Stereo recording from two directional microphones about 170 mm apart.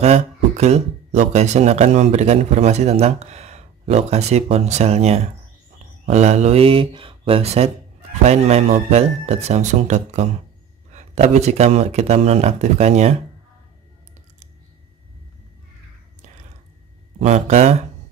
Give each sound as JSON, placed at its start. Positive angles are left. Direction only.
{"t": 0.0, "sound": "speech", "side_deg": -40}
{"t": 17.2, "sound": "speech", "side_deg": -45}